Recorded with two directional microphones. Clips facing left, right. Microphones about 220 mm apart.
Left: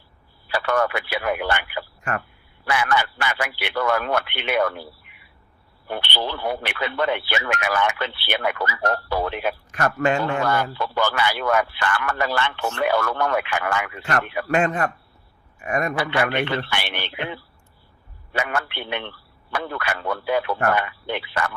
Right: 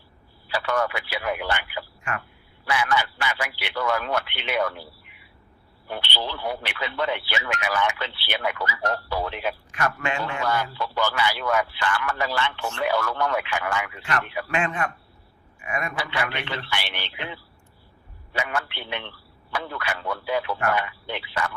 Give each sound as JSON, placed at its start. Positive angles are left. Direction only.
{"t": 0.4, "sound": "speech", "side_deg": 55}
{"t": 5.9, "sound": "a man's voice", "side_deg": 55}